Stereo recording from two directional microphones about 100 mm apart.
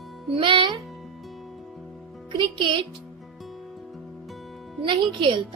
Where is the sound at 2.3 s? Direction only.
55° right (ahead or behind).